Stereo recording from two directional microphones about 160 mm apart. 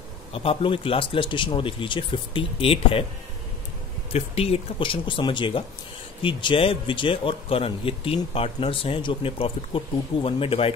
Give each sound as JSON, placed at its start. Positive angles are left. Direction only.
{"t": 0.3, "sound": "speech", "side_deg": 35}
{"t": 4.1, "sound": "speech", "side_deg": 40}